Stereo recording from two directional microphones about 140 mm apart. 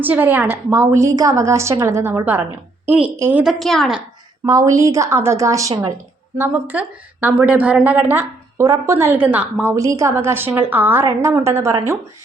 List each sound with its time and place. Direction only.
0.0 s a woman's voice: 15° right (ahead or behind)
3.4 s a woman's voice: centre (ahead or behind)
4.4 s a woman's voice: 25° right (ahead or behind)
9.7 s a woman's voice: 20° right (ahead or behind)